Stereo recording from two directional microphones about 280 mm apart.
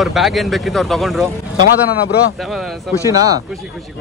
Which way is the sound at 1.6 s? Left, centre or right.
Left.